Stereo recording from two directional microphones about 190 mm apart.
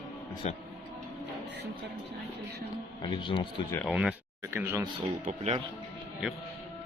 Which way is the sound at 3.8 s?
5° right (ahead or behind).